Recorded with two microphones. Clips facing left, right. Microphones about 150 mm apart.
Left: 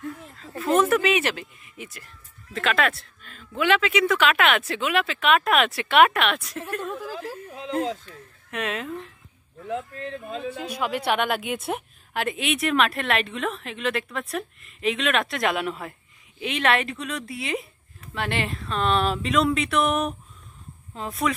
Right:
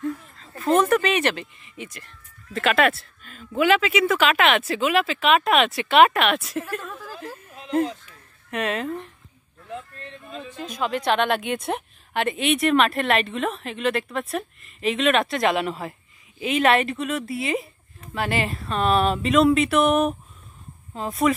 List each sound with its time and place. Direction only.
0.6 s speech: 5° left (ahead or behind)
6.8 s a sound: 25° left (ahead or behind)
8.5 s speech: centre (ahead or behind)
9.7 s speech: 90° left
10.5 s speech: 10° left (ahead or behind)